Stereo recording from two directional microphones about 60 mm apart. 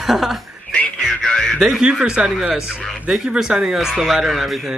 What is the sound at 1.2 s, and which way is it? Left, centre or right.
Radio, centre.